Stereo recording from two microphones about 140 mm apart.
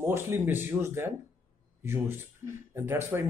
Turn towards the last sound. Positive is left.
turn(degrees=-15)  # may be behind; listen again after turning